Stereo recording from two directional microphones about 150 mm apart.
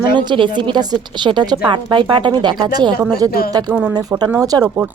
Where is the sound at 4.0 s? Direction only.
25° right (ahead or behind).